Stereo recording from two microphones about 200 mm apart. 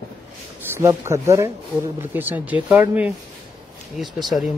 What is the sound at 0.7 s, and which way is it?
Speech, 15° right (ahead or behind).